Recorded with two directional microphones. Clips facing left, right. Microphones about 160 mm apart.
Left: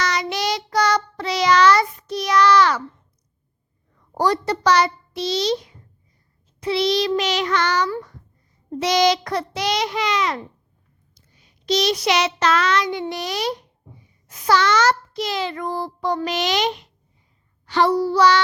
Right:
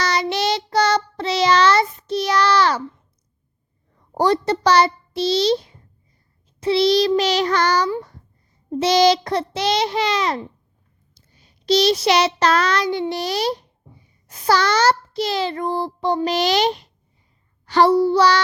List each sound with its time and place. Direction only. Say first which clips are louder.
0.0 s child singing: right 2 dB; 30° right (ahead or behind)
3.9 s a child's voice: right 2 dB; 25° right (ahead or behind)
8.8 s child singing: right 3 dB; 30° right (ahead or behind)
11.3 s a child's voice: right 4 dB; 30° right (ahead or behind)
17.9 s child singing: right 2 dB; 25° right (ahead or behind)